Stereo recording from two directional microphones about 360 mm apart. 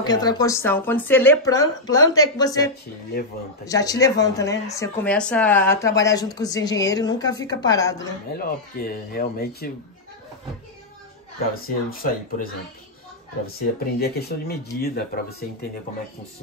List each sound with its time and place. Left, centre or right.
0.0 s speech: centre
8.5 s speech: left
11.5 s speech: left
13.6 s speech: left